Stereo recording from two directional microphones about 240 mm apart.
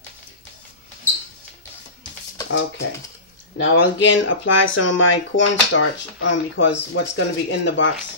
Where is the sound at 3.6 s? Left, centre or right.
Left.